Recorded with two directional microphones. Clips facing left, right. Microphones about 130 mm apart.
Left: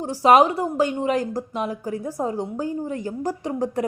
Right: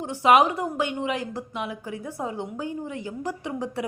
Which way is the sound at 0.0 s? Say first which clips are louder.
Left 3 dB; 35° left (ahead or behind).